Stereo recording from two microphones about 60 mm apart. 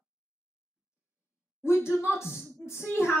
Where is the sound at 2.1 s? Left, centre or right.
Left.